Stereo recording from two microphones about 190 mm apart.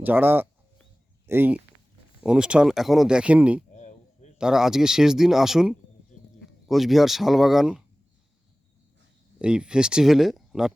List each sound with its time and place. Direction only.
0.0 s speech: 10° right (ahead or behind)
3.7 s a sound: 40° left (ahead or behind)
4.4 s speech: 5° right (ahead or behind)
9.4 s speech: 5° right (ahead or behind)